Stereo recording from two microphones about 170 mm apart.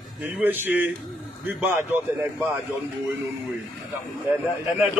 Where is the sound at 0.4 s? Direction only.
10° right (ahead or behind).